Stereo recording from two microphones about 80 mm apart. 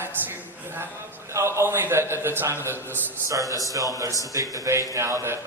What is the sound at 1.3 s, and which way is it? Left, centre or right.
A man's voice, right.